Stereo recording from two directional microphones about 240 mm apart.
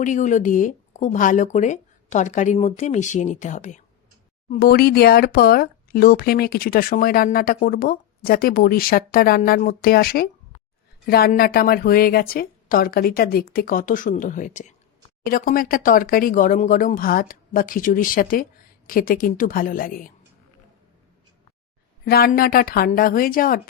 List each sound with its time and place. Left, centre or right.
0.0 s speech: left
22.0 s speech: left